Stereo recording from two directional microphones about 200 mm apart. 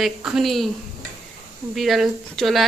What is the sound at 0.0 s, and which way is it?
Speech, centre (ahead or behind).